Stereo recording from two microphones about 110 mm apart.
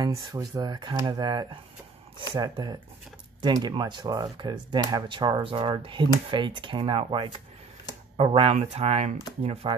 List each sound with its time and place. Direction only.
0.0 s speech: 35° right (ahead or behind); by 9.7 s 70° right (ahead or behind)